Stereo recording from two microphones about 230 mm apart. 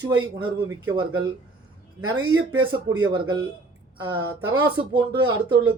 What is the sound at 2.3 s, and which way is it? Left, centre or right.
Speech, centre.